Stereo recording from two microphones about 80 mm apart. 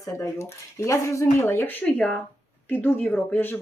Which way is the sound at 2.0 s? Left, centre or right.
Centre.